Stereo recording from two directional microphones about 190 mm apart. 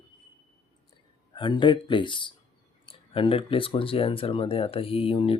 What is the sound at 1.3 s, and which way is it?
Speech, 25° left (ahead or behind).